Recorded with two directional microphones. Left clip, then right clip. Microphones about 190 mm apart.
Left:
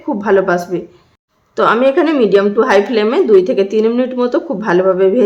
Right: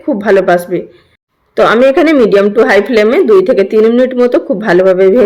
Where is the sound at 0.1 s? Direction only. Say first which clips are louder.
Right 4 dB; 15° right (ahead or behind).